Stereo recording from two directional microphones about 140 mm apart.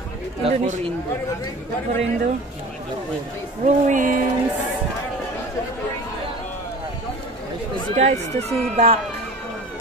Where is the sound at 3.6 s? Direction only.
65° right (ahead or behind).